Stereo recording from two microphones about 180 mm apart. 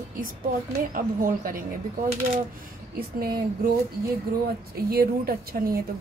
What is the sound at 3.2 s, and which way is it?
A woman's voice, 60° right (ahead or behind).